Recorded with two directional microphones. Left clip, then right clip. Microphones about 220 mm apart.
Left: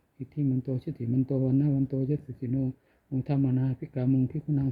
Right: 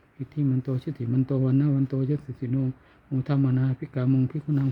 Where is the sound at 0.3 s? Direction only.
15° right (ahead or behind).